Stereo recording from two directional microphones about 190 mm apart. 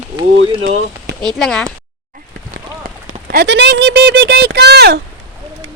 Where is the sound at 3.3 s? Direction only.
65° right (ahead or behind).